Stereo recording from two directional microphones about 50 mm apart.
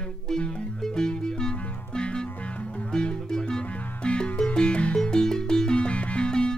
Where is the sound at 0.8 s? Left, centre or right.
Centre.